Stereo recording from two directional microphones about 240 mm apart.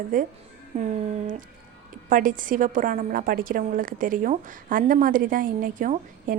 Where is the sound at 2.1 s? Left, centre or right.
Right.